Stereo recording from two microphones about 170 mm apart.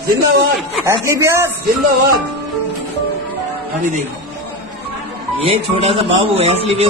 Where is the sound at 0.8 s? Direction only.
15° right (ahead or behind).